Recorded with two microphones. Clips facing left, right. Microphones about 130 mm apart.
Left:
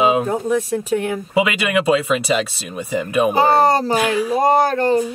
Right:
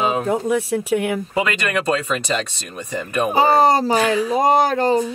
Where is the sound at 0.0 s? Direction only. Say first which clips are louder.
Left 4 dB; 5° left (ahead or behind).